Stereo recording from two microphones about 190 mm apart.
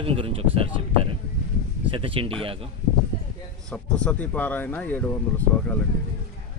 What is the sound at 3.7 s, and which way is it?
Speech, 5° left (ahead or behind).